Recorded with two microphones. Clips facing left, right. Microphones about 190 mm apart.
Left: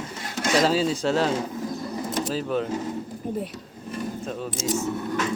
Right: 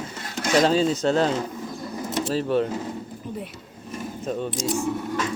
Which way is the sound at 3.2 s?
50° left (ahead or behind).